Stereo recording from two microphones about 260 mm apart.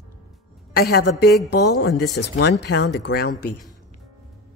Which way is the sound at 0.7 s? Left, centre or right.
Left.